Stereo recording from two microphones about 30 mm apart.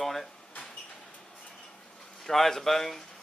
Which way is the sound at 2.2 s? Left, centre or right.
Centre.